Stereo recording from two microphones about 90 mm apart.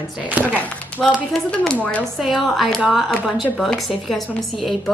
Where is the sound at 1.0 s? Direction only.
5° left (ahead or behind).